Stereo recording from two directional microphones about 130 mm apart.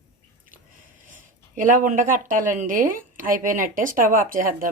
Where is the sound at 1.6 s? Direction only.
90° right.